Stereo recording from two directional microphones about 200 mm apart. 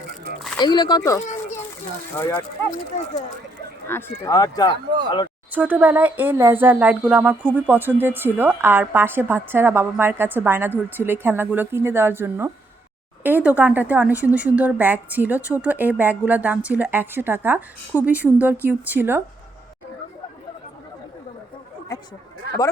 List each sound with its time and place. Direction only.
0.6 s speech: 20° left (ahead or behind)
1.2 s children playing: 35° left (ahead or behind)
2.1 s speech: 10° left (ahead or behind)
3.8 s speech: 10° left (ahead or behind)
5.5 s speech: 10° right (ahead or behind)